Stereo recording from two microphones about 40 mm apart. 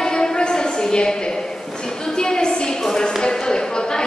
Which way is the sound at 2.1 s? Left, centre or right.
Centre.